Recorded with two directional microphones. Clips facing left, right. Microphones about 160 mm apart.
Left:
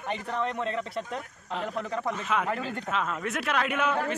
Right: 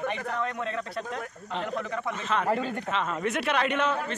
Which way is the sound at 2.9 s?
5° left (ahead or behind).